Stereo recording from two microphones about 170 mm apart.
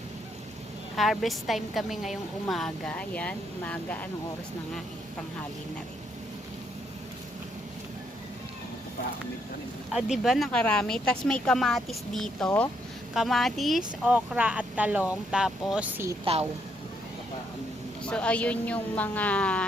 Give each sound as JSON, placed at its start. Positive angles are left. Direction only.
{"t": 0.9, "sound": "a woman's voice", "side_deg": 0}
{"t": 9.9, "sound": "a woman's voice", "side_deg": 0}
{"t": 16.2, "sound": "a woman's voice", "side_deg": -35}
{"t": 18.0, "sound": "a woman's voice", "side_deg": 5}